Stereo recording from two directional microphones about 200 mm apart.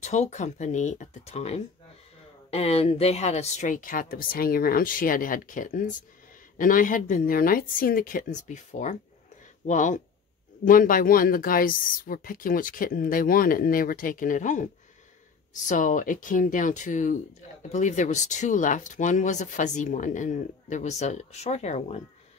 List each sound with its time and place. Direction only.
0.0 s speech: 35° left (ahead or behind)
15.7 s speech: 40° left (ahead or behind)